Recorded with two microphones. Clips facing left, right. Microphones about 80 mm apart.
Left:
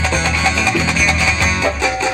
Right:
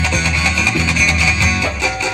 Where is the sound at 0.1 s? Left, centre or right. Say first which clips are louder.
Left 2 dB; left.